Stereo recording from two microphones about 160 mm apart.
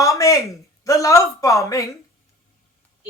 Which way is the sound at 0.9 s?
20° left (ahead or behind).